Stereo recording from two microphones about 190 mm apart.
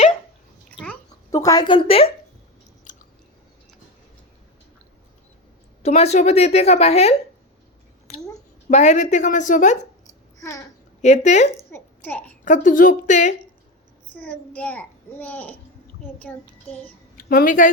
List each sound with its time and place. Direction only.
1.3 s a woman's voice: 20° left (ahead or behind)
2.9 s chewing: 40° left (ahead or behind)
5.8 s a woman's voice: 35° left (ahead or behind)
8.7 s a woman's voice: 40° left (ahead or behind)
11.0 s a woman's voice: 40° left (ahead or behind)
11.7 s a sound: 10° left (ahead or behind)
12.5 s a woman's voice: 45° left (ahead or behind)
14.2 s a child's voice: 5° left (ahead or behind)
16.3 s child singing: 5° left (ahead or behind)
17.2 s speech: 50° left (ahead or behind)